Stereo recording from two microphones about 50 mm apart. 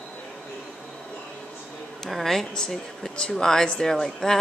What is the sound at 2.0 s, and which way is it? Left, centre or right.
Speech, centre.